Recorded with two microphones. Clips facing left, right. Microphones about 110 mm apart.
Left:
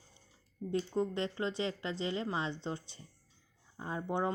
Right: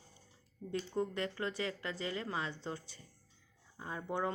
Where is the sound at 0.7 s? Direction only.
25° left (ahead or behind).